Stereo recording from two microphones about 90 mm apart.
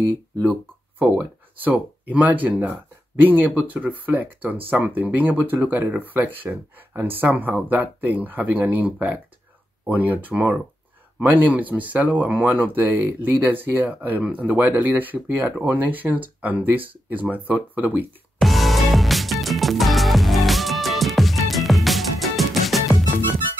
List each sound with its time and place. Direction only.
0.5 s speech: 15° right (ahead or behind)
18.4 s music: centre (ahead or behind)